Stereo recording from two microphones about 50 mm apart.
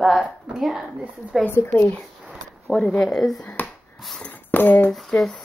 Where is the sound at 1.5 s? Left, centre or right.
Left.